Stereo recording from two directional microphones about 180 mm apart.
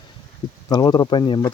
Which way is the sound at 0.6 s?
20° left (ahead or behind).